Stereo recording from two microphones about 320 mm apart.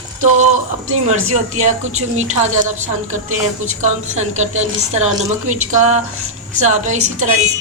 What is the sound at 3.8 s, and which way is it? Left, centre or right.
Speech, right.